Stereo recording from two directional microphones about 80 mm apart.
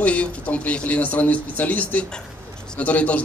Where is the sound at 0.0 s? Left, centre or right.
Centre.